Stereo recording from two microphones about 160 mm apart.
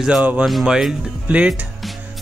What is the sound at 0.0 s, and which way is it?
Speech, 10° right (ahead or behind).